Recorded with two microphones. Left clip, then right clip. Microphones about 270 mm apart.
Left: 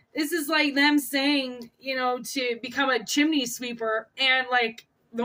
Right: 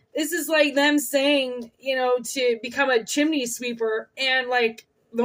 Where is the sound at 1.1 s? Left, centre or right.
Left.